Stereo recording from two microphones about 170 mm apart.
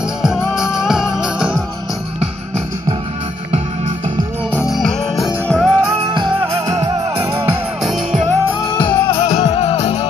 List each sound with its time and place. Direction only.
0.2 s music: 5° right (ahead or behind)
4.6 s music: centre (ahead or behind)
7.8 s music: centre (ahead or behind)
8.7 s music: 30° left (ahead or behind)